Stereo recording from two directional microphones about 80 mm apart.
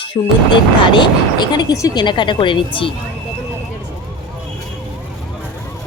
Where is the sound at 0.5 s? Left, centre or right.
Left.